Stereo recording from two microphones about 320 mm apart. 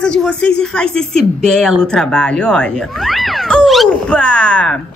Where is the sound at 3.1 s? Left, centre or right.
Centre.